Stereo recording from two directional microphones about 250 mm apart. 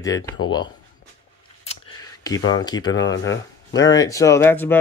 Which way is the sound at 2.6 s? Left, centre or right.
Centre.